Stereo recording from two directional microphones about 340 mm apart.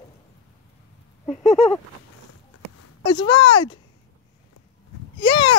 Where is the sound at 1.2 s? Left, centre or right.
Left.